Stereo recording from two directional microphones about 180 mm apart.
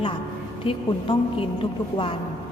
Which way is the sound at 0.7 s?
30° left (ahead or behind).